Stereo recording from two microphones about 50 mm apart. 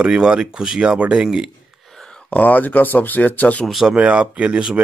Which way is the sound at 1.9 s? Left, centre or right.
Centre.